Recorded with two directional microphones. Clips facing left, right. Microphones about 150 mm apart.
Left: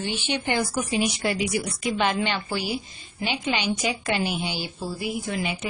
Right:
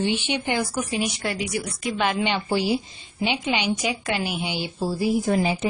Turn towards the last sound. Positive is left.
turn(degrees=-35)  # may be behind; listen again after turning